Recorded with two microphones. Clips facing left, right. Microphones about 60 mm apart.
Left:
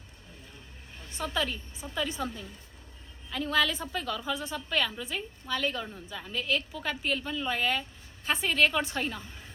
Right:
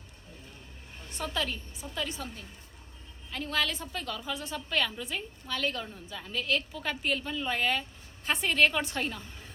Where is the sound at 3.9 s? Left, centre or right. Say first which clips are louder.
Left 3 dB; centre.